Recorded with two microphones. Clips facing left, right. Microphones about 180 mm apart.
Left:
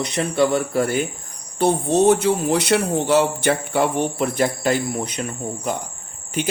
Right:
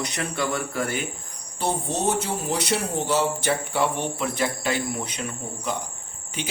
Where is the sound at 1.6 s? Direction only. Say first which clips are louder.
Left 9 dB; 65° left (ahead or behind); by 5.1 s 45° left (ahead or behind).